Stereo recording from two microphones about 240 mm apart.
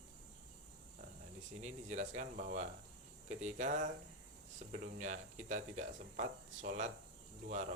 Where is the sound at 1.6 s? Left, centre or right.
Right.